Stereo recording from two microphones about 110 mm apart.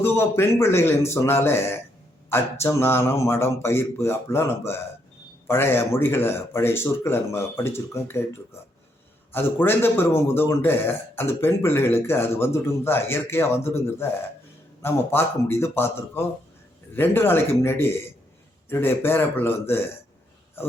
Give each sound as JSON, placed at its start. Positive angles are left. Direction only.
{"t": 0.0, "sound": "a man's voice", "side_deg": 20}
{"t": 9.3, "sound": "a man's voice", "side_deg": 20}